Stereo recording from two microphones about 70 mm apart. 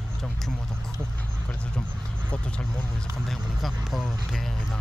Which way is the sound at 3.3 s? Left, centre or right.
Centre.